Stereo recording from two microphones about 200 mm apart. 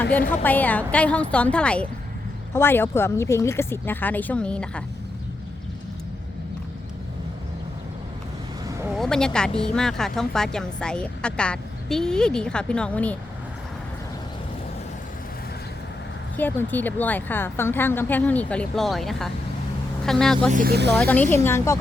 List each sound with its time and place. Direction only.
0.0 s a woman's voice: 10° left (ahead or behind)
8.8 s vehicle: centre (ahead or behind)
9.6 s speech: 5° left (ahead or behind)
16.4 s a woman's voice: 10° left (ahead or behind)
20.5 s speech: 45° right (ahead or behind)
21.0 s a woman's voice: 10° left (ahead or behind)